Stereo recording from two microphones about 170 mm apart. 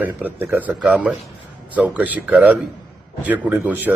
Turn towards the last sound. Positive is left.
turn(degrees=-10)  # may be behind; listen again after turning